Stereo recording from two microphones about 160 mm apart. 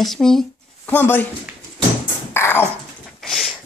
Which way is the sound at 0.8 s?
15° left (ahead or behind).